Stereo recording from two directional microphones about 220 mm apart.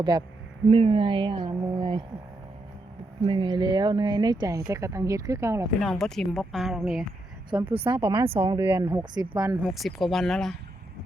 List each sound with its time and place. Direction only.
0.0 s speech: 20° right (ahead or behind)
3.2 s speech: 25° right (ahead or behind)
5.8 s speech: centre (ahead or behind)
7.7 s speech: 25° right (ahead or behind)
8.6 s speech: 10° right (ahead or behind)
9.6 s speech: centre (ahead or behind)